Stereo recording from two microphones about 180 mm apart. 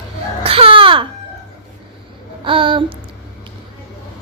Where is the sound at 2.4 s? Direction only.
30° right (ahead or behind).